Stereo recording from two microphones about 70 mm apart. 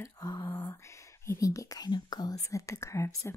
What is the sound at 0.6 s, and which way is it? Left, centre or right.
Speech, left.